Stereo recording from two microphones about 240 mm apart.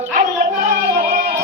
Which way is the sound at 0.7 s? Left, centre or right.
Right.